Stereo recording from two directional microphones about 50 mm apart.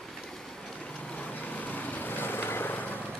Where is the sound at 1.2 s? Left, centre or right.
Left.